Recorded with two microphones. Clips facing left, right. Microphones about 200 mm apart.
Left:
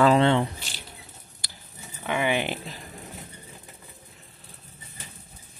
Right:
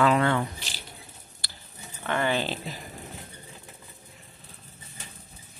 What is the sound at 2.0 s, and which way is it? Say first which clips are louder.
Speech: left 1 dB; 10° left (ahead or behind).